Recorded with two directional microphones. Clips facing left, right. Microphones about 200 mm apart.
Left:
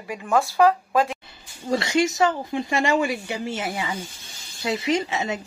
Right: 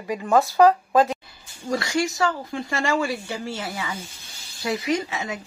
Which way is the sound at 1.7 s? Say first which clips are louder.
Left 3 dB; 20° left (ahead or behind).